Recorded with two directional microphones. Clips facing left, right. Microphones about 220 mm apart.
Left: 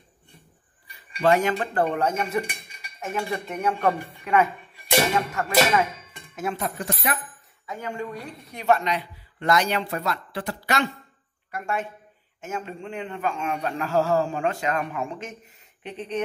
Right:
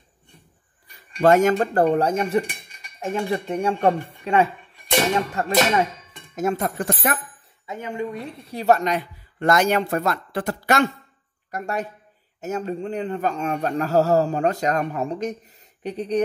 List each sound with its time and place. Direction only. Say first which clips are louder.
1.1 s a man's voice: right 5 dB; 45° right (ahead or behind)
7.6 s a man's voice: right 3 dB; 20° right (ahead or behind); by 16.2 s 40° right (ahead or behind)